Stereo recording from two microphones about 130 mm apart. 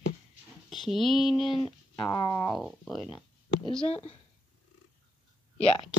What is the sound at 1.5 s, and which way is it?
Speech, 35° left (ahead or behind).